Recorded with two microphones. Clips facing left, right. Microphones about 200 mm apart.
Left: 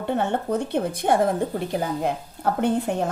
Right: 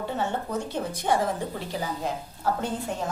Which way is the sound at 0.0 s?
60° left (ahead or behind).